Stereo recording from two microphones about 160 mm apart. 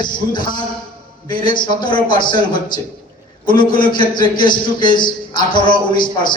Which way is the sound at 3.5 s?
30° left (ahead or behind).